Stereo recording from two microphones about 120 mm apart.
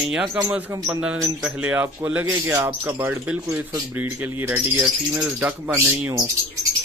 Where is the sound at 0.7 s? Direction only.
20° right (ahead or behind).